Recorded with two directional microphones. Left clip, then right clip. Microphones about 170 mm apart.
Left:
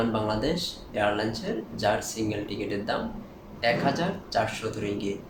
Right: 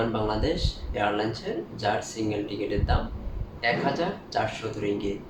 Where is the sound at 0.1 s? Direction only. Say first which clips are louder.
Even; 20° left (ahead or behind).